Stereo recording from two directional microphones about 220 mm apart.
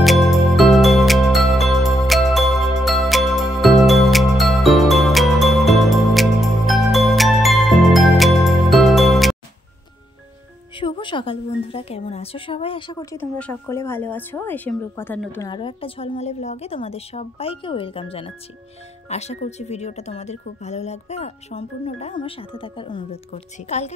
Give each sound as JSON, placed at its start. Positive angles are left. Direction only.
{"t": 0.0, "sound": "music", "side_deg": 0}
{"t": 10.8, "sound": "a woman's voice", "side_deg": 20}
{"t": 15.5, "sound": "speech", "side_deg": 25}